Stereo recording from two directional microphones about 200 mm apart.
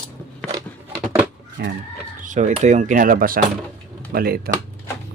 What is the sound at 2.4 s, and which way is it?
Speech, 35° right (ahead or behind).